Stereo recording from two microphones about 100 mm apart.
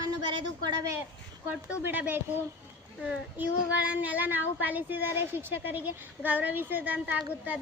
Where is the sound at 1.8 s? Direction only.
20° right (ahead or behind).